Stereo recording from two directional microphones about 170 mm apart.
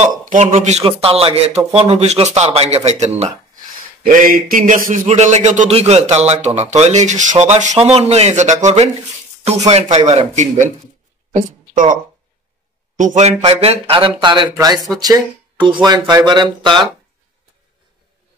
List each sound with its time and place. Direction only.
0.2 s a sound: 50° right (ahead or behind)
0.5 s speech: 40° right (ahead or behind)
4.0 s a man's voice: 55° right (ahead or behind)
13.0 s speech: 45° right (ahead or behind); by 16.8 s 25° right (ahead or behind)